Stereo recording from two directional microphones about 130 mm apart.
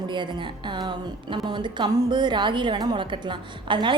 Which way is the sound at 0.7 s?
35° right (ahead or behind).